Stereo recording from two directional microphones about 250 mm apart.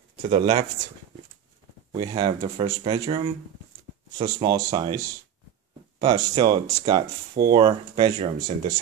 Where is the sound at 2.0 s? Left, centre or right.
Centre.